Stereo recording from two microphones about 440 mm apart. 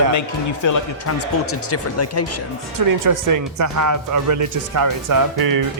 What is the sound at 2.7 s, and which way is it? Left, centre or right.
Speech, right.